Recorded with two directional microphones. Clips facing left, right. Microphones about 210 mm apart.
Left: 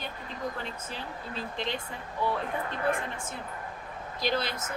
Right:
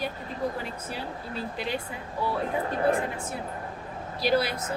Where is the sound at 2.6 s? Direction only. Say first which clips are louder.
Right 6 dB; 35° right (ahead or behind).